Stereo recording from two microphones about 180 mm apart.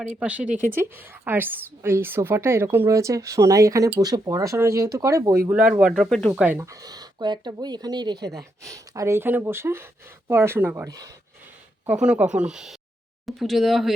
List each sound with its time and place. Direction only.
0.0 s a woman's voice: 10° right (ahead or behind)
6.4 s a woman's voice: 15° right (ahead or behind)
11.9 s speech: 5° right (ahead or behind)